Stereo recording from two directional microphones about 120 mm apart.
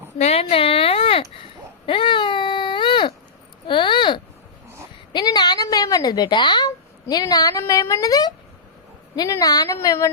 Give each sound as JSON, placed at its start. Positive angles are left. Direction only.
{"t": 0.2, "sound": "speech", "side_deg": 60}
{"t": 1.9, "sound": "baby cry", "side_deg": 45}
{"t": 3.7, "sound": "a sound", "side_deg": 40}
{"t": 7.1, "sound": "a woman's voice", "side_deg": 35}